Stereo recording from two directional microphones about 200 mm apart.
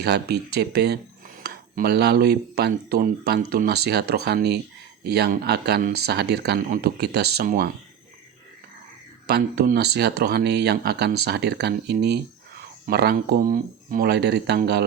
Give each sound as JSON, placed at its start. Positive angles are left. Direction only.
{"t": 0.0, "sound": "speech", "side_deg": -55}
{"t": 9.2, "sound": "speech", "side_deg": -55}